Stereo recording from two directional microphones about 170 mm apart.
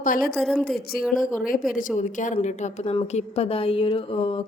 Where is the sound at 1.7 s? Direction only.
50° left (ahead or behind).